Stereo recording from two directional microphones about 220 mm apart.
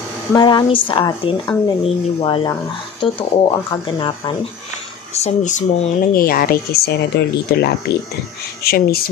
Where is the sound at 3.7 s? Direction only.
20° left (ahead or behind).